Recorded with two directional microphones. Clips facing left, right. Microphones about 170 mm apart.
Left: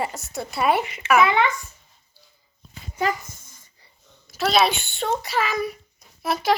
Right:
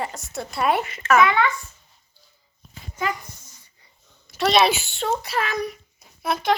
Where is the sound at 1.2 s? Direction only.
25° left (ahead or behind).